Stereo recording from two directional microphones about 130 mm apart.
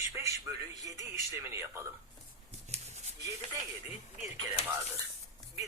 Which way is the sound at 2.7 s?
55° right (ahead or behind).